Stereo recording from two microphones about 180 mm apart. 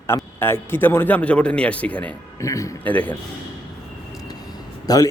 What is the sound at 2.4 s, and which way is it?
Speech, 20° left (ahead or behind).